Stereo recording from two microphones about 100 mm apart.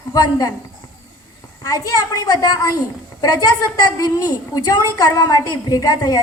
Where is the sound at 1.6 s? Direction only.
35° left (ahead or behind).